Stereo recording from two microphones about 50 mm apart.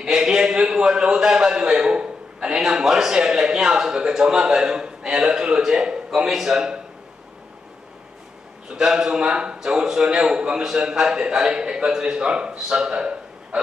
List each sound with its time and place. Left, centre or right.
0.0 s a man's voice: centre
8.7 s a man's voice: centre